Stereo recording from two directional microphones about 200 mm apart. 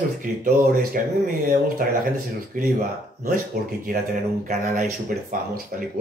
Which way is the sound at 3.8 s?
40° right (ahead or behind).